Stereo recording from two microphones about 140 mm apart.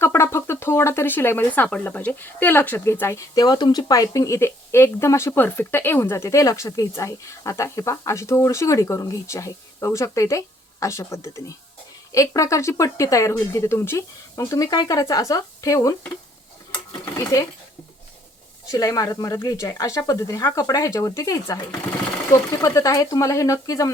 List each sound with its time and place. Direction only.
0.0 s speech: 20° left (ahead or behind)
18.7 s speech: 25° left (ahead or behind)